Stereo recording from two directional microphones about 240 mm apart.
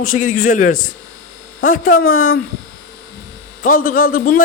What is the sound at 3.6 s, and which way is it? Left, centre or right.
Speech, left.